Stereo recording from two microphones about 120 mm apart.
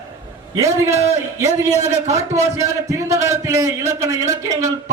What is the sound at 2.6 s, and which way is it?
A man's voice, 25° right (ahead or behind).